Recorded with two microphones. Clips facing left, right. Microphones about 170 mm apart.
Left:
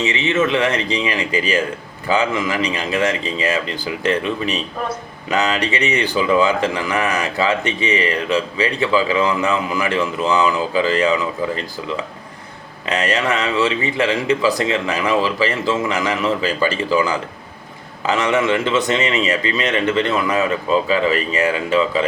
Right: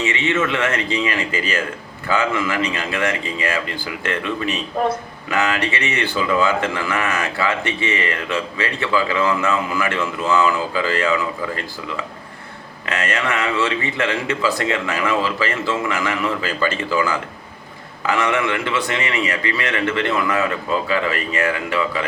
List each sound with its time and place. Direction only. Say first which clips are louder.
0.0 s a man's voice: left 2 dB; 20° left (ahead or behind)
12.8 s a man's voice: left 3 dB; 20° left (ahead or behind)